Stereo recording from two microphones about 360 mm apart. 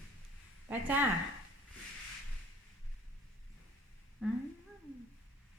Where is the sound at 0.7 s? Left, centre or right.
Centre.